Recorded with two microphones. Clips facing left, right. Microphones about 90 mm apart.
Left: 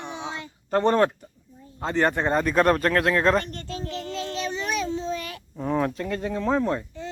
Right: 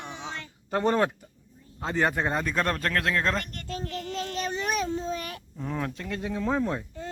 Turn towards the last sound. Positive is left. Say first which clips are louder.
# left 4 dB
turn(degrees=-5)  # may be behind; listen again after turning